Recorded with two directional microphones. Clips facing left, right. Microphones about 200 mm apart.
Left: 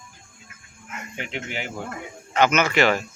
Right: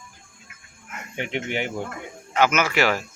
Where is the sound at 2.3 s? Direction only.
5° right (ahead or behind).